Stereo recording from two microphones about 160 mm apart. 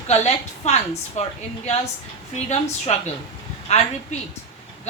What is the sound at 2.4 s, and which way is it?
A woman's voice, 45° left (ahead or behind).